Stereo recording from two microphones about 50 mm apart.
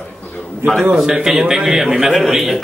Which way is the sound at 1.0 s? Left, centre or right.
Centre.